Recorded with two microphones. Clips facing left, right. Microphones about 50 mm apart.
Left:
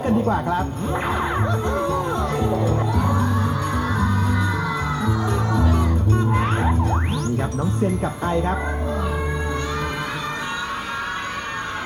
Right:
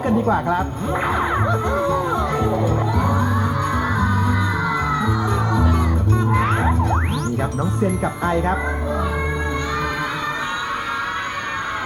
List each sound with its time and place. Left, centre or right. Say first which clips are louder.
0.0 s speech: right 1 dB; centre
2.6 s crowd: right 2 dB; right
3.9 s music: right 2 dB; centre
6.3 s music: right 2 dB; right
7.6 s speech: right 2 dB; right
8.3 s speech: right 2 dB; right